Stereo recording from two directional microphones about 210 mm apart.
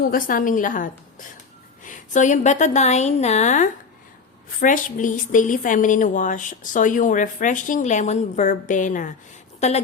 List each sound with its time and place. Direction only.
0.1 s a woman's voice: 40° left (ahead or behind)